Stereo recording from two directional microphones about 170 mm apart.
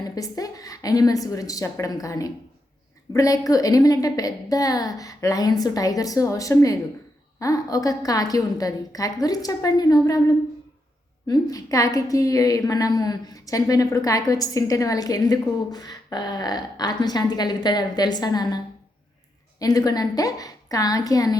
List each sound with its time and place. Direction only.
0.2 s a woman's voice: 20° left (ahead or behind)